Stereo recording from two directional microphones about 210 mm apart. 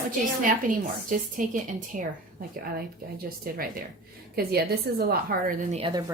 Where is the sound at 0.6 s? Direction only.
40° right (ahead or behind).